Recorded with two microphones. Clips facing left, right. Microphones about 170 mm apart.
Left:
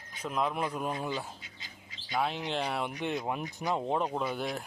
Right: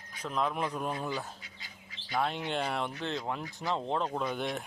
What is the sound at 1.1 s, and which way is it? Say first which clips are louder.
Dog: left 1 dB; 20° left (ahead or behind).